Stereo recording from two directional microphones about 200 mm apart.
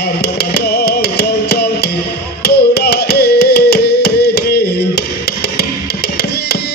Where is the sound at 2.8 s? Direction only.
55° left (ahead or behind).